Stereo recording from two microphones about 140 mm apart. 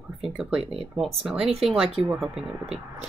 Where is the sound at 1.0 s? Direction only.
Centre (ahead or behind).